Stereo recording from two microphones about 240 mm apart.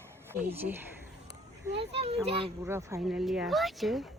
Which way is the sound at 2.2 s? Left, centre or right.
Right.